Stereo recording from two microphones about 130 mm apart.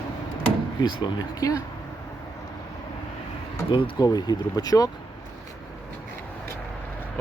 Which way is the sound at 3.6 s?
40° left (ahead or behind).